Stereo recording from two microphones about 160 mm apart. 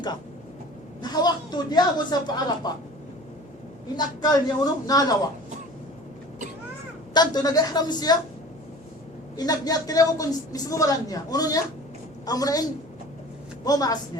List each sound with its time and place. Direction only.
1.0 s a woman's voice: 25° left (ahead or behind)
3.9 s a woman's voice: 25° left (ahead or behind)
7.1 s a woman's voice: 25° left (ahead or behind)
9.3 s a woman's voice: 25° left (ahead or behind)
13.7 s a woman's voice: 25° left (ahead or behind)